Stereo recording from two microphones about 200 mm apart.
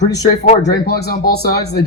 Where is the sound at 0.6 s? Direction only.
55° left (ahead or behind).